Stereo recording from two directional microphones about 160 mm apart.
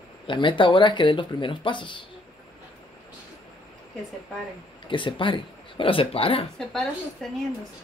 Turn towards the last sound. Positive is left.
turn(degrees=0)  # may be behind; listen again after turning